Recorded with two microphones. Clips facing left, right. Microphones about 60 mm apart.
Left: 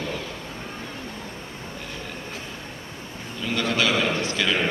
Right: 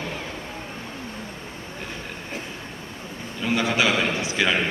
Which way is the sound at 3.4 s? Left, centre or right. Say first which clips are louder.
Right 2 dB; centre.